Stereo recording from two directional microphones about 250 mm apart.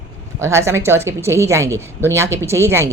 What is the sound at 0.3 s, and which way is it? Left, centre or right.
Speech, centre.